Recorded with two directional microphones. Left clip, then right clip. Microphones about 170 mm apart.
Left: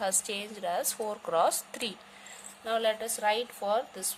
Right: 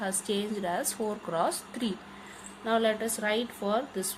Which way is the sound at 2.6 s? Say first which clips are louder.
Right 2 dB; 35° left (ahead or behind).